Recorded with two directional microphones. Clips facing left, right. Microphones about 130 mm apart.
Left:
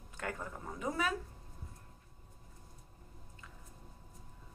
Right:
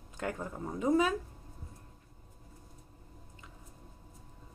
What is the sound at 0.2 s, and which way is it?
Speech, 20° right (ahead or behind).